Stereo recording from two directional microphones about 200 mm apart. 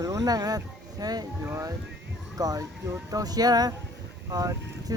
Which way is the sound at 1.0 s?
20° right (ahead or behind).